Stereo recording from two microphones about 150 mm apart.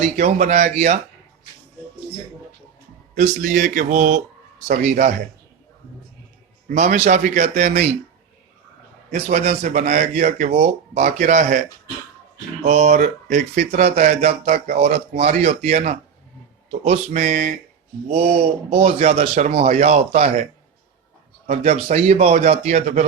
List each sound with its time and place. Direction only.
0.0 s speech: 50° right (ahead or behind)
3.2 s speech: 60° right (ahead or behind)
6.7 s speech: 50° right (ahead or behind)
9.0 s speech: 45° right (ahead or behind)
12.6 s speech: 50° right (ahead or behind)
17.2 s speech: 50° right (ahead or behind)
21.4 s speech: 45° right (ahead or behind)